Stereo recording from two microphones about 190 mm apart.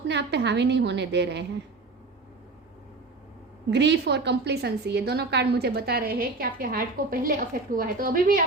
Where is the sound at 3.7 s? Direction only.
65° right (ahead or behind).